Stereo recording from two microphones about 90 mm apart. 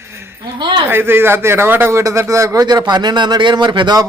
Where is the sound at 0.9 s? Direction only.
25° right (ahead or behind).